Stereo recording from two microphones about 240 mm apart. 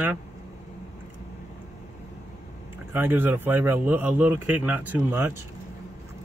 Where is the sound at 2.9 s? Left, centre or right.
Centre.